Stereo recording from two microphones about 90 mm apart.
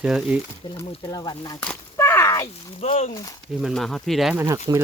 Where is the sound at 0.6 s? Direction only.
50° left (ahead or behind).